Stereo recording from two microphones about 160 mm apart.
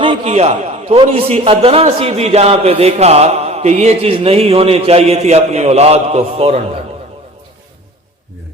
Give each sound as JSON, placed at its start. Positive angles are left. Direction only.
{"t": 0.0, "sound": "a man's voice", "side_deg": -35}